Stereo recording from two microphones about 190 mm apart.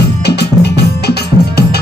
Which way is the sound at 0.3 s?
60° left (ahead or behind).